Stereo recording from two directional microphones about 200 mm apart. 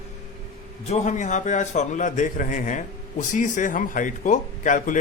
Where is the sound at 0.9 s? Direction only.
35° left (ahead or behind).